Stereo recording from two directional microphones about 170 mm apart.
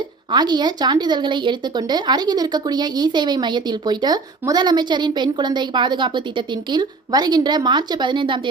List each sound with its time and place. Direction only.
0.3 s a woman's voice: 25° right (ahead or behind)